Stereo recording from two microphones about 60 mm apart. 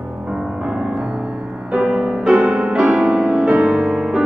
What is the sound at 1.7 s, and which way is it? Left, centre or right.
Music, centre.